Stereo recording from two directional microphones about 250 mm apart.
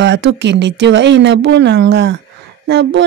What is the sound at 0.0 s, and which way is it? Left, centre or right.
Speech, right.